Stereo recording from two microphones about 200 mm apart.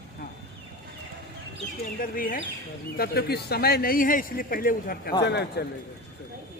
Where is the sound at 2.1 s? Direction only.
45° left (ahead or behind).